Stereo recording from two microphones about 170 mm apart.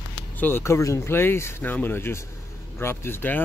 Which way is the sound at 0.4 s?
15° left (ahead or behind).